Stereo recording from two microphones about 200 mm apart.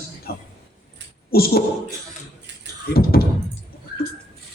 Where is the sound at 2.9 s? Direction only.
50° left (ahead or behind).